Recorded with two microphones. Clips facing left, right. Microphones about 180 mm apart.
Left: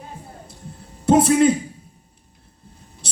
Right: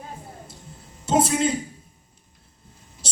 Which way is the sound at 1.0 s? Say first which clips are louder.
Left 7 dB; 60° left (ahead or behind).